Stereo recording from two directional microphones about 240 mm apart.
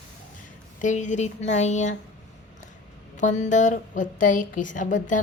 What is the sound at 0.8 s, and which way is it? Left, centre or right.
Speech, left.